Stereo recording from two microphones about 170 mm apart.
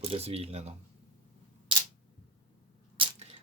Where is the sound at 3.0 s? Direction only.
35° right (ahead or behind).